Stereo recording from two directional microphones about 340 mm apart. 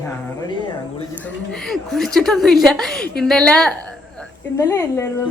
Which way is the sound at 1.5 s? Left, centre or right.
Centre.